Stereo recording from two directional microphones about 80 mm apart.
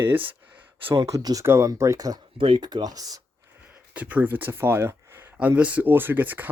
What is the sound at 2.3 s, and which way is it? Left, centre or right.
Speech, right.